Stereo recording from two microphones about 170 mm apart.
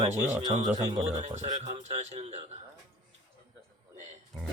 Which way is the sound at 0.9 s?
40° right (ahead or behind).